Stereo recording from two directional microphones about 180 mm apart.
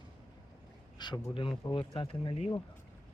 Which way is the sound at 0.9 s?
25° left (ahead or behind).